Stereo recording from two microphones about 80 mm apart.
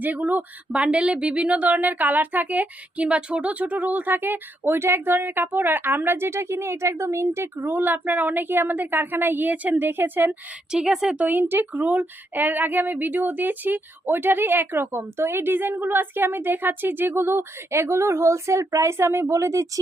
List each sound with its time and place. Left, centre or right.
0.0 s speech: right
10.7 s a woman's voice: centre
11.3 s speech: right